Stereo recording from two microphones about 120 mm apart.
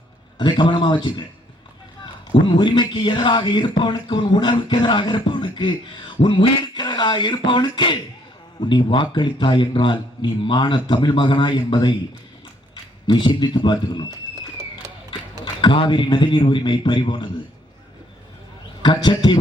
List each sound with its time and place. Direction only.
0.3 s a man's voice: 40° left (ahead or behind)
2.3 s speech: 40° left (ahead or behind)
15.6 s a man's voice: 45° left (ahead or behind)
18.8 s a man's voice: 40° left (ahead or behind)